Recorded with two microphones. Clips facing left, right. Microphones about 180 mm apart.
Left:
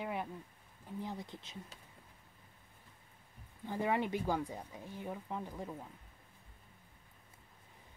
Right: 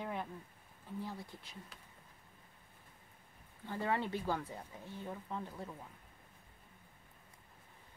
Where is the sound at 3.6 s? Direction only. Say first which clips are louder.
Left 2 dB; 15° left (ahead or behind).